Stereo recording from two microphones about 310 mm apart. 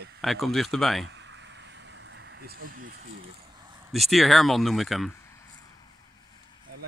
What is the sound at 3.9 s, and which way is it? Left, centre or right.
Speech, centre.